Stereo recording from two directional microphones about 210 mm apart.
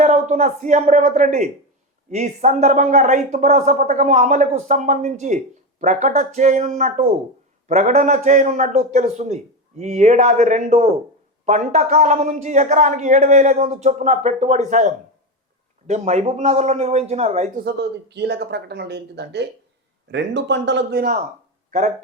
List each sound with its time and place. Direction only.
0.0 s a man's voice: 30° right (ahead or behind)
17.7 s a man's voice: 50° right (ahead or behind)
21.7 s speech: 35° right (ahead or behind)